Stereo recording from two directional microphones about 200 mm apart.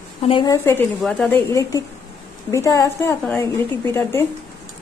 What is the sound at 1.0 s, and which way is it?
A woman's voice, 5° left (ahead or behind).